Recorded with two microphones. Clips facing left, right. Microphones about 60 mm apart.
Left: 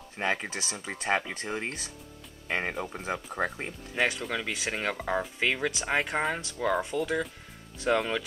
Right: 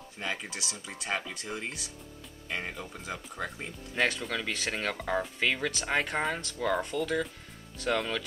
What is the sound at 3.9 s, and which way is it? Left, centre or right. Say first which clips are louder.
Speech: left 1 dB; centre.